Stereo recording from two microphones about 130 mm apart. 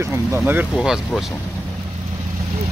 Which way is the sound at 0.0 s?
20° right (ahead or behind).